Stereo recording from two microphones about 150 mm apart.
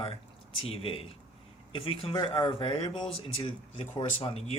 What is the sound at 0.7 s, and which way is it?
Speech, 35° left (ahead or behind).